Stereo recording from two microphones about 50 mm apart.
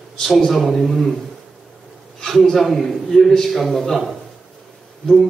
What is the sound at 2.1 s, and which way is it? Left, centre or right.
A man's voice, centre.